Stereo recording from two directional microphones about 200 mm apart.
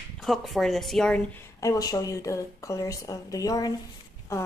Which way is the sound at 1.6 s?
20° left (ahead or behind).